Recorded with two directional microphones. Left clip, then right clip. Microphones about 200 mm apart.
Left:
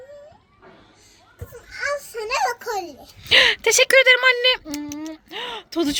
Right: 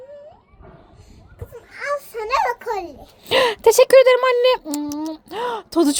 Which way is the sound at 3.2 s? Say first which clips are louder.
Even; 40° right (ahead or behind).